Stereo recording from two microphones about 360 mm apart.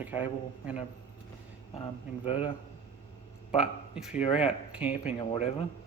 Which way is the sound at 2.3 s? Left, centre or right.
Centre.